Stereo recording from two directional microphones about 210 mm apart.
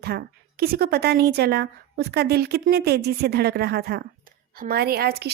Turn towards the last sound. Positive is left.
turn(degrees=-50)  # may be behind; listen again after turning